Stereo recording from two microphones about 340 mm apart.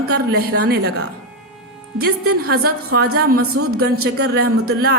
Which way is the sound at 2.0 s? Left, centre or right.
Right.